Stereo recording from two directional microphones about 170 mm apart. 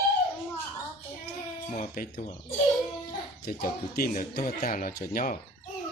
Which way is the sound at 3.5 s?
55° left (ahead or behind).